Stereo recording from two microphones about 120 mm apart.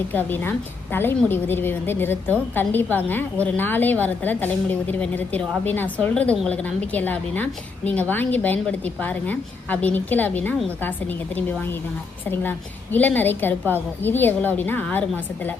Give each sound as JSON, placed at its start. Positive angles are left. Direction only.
{"t": 0.1, "sound": "a woman's voice", "side_deg": 15}